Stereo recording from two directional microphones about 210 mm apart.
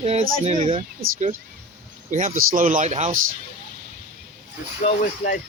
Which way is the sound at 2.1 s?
35° right (ahead or behind).